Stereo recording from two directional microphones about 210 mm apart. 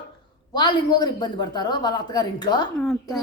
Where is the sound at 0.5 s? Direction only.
20° left (ahead or behind).